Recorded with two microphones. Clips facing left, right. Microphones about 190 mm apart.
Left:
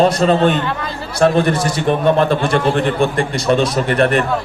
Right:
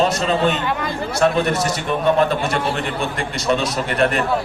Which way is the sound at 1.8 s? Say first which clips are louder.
Left 4 dB; 50° left (ahead or behind).